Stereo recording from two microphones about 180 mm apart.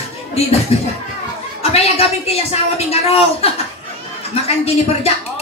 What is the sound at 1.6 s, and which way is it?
A woman's voice, 35° left (ahead or behind).